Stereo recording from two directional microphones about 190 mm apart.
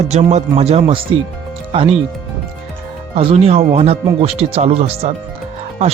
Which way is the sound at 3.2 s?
35° right (ahead or behind).